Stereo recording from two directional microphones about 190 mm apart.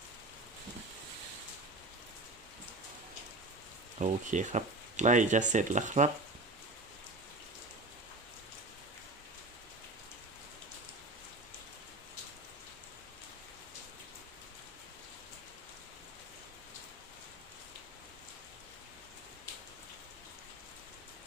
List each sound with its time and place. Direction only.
3.9 s speech: 40° right (ahead or behind)